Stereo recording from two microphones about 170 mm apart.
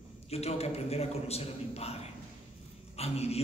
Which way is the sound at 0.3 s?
40° left (ahead or behind).